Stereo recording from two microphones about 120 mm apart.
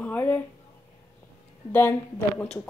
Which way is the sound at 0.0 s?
15° left (ahead or behind).